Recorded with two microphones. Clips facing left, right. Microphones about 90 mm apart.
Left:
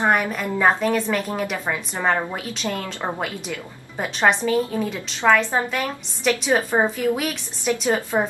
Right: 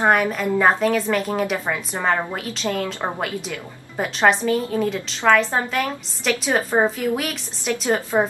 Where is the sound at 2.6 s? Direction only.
20° right (ahead or behind).